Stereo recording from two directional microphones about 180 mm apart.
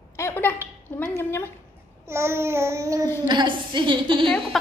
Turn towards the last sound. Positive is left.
turn(degrees=-25)  # may be behind; listen again after turning